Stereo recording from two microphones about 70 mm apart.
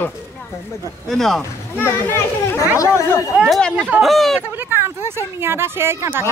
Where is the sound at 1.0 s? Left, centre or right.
Centre.